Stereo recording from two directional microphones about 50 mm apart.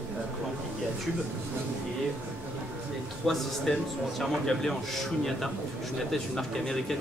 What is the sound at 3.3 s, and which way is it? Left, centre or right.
A man's voice, centre.